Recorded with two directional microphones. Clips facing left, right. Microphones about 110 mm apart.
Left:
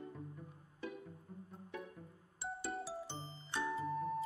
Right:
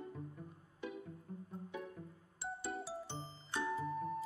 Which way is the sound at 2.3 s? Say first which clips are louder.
Even; centre (ahead or behind).